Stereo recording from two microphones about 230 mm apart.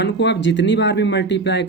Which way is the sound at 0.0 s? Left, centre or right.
Left.